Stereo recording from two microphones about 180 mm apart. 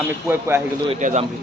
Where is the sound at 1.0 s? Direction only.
45° right (ahead or behind).